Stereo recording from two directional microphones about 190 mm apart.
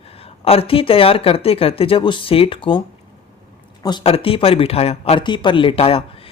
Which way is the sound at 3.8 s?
25° left (ahead or behind).